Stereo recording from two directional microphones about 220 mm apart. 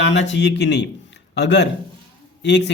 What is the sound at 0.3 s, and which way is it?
A man's voice, 50° left (ahead or behind).